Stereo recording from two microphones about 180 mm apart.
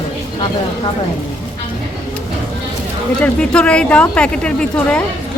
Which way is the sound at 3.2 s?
5° left (ahead or behind).